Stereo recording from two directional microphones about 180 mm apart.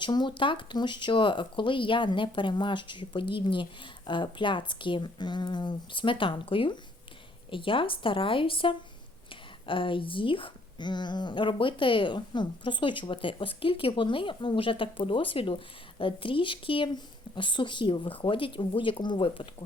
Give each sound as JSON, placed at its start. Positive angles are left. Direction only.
{"t": 0.0, "sound": "speech", "side_deg": 25}